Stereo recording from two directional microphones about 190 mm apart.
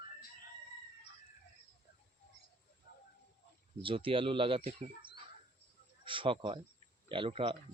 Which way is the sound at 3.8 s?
30° right (ahead or behind).